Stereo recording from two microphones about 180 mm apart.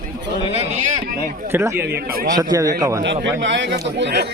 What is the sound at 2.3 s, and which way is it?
Speech, 20° right (ahead or behind).